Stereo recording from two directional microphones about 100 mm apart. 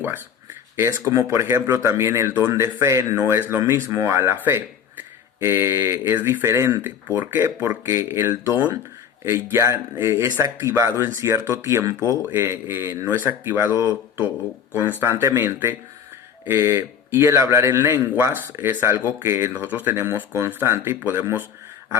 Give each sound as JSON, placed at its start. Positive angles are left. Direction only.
{"t": 0.8, "sound": "speech", "side_deg": -30}